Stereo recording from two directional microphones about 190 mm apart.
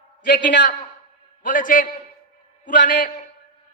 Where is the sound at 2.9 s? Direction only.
45° left (ahead or behind).